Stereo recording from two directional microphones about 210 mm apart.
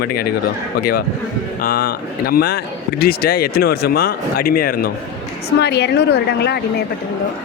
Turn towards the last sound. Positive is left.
turn(degrees=50)  # may be behind; listen again after turning